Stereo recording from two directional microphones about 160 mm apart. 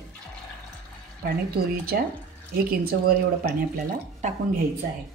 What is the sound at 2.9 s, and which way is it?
Speech, 70° right (ahead or behind).